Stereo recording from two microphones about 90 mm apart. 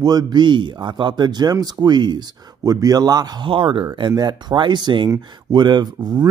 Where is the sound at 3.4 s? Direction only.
70° right (ahead or behind).